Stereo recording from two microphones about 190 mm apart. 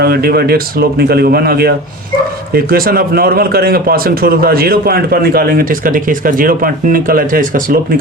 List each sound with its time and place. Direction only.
0.0 s speech: 55° right (ahead or behind)